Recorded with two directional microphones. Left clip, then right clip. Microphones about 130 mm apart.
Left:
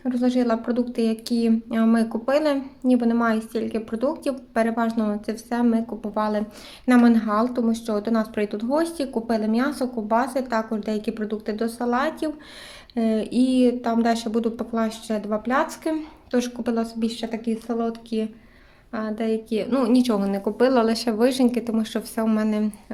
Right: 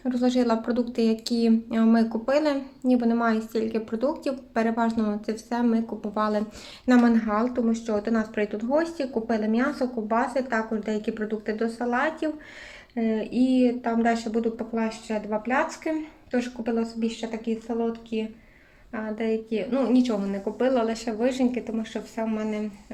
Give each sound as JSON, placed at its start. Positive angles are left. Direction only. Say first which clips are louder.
{"t": 0.0, "sound": "a woman's voice", "louder": "left 1 dB", "side_deg": 5}
{"t": 12.9, "sound": "speech", "louder": "left 3 dB", "side_deg": 45}
{"t": 17.2, "sound": "a woman's voice", "louder": "left 2 dB", "side_deg": 50}
{"t": 18.9, "sound": "a woman's voice", "louder": "left 2 dB", "side_deg": 45}